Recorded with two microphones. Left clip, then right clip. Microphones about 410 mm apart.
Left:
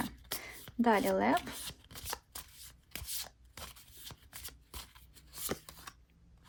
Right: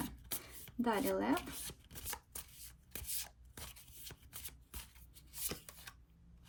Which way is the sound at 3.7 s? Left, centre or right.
Centre.